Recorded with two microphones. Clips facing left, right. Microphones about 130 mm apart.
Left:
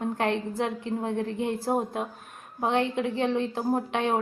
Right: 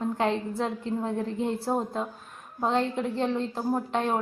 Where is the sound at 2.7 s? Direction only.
70° left (ahead or behind).